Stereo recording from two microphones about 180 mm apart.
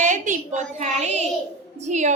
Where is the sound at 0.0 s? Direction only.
40° right (ahead or behind).